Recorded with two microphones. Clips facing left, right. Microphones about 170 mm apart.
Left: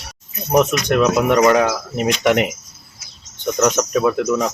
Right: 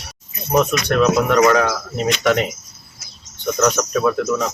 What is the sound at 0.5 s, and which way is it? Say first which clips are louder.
Speech: left 1 dB; 15° left (ahead or behind).